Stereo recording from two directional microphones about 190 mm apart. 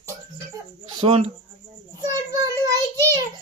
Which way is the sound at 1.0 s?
30° right (ahead or behind).